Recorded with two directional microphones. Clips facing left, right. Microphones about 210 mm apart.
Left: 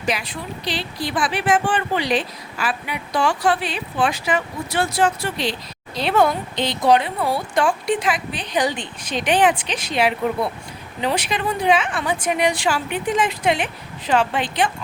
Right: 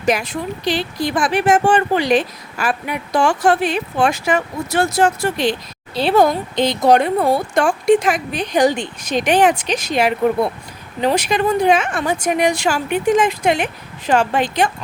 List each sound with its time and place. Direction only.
0.0 s speech: 45° right (ahead or behind)
5.9 s speech: 30° right (ahead or behind)